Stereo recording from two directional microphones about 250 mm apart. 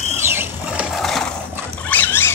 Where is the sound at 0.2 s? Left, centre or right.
Centre.